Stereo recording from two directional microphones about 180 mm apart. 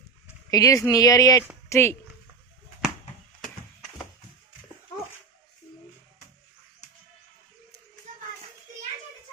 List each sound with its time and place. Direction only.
0.5 s speech: 20° left (ahead or behind)